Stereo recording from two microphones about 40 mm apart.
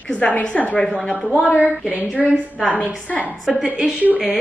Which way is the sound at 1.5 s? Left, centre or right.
Right.